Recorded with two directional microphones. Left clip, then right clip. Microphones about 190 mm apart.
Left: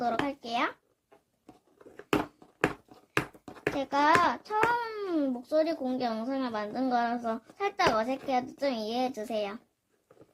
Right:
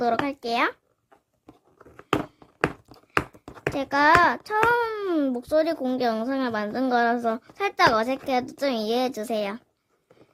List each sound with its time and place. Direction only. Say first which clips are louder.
0.3 s a child's voice: right 6 dB; 45° right (ahead or behind)
2.6 s a sound: right 3 dB; 20° right (ahead or behind)
3.8 s a child's voice: right 6 dB; 40° right (ahead or behind)